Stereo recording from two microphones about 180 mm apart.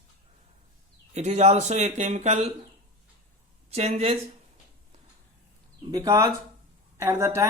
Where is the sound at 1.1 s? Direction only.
40° right (ahead or behind).